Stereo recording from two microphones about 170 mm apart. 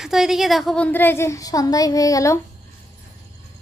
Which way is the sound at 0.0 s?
Centre (ahead or behind).